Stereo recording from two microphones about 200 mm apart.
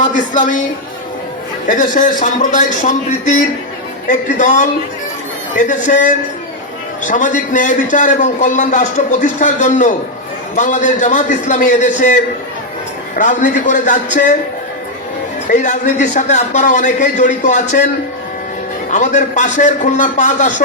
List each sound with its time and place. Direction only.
1.6 s a man's voice: 40° left (ahead or behind)
15.4 s a man's voice: 40° left (ahead or behind)
18.9 s a man's voice: 40° left (ahead or behind)